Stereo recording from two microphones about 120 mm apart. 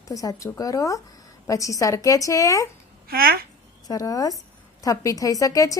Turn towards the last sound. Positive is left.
turn(degrees=30)  # may be behind; listen again after turning